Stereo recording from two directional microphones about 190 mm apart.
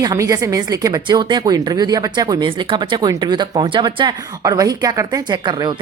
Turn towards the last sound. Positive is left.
turn(degrees=-25)  # may be behind; listen again after turning